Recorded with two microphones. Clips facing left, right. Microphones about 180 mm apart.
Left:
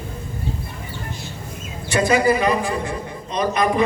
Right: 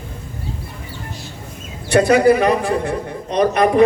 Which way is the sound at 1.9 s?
65° right (ahead or behind).